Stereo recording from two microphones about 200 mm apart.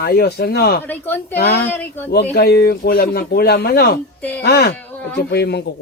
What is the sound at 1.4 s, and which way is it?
Speech, 55° left (ahead or behind).